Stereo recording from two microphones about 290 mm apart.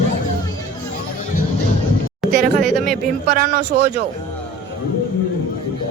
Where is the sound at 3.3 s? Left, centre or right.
Right.